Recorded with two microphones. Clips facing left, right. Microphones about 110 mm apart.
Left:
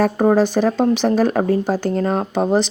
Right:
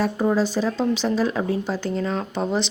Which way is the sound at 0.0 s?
55° left (ahead or behind).